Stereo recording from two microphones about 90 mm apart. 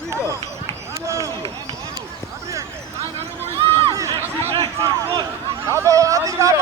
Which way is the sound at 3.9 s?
35° right (ahead or behind).